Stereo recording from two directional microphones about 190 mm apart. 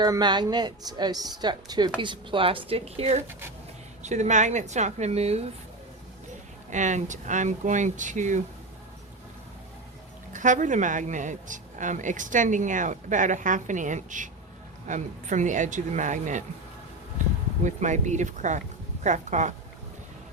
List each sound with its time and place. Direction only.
0.0 s a woman's voice: 20° right (ahead or behind)
6.7 s speech: 40° right (ahead or behind)
10.3 s speech: 40° right (ahead or behind)
17.6 s speech: 40° right (ahead or behind)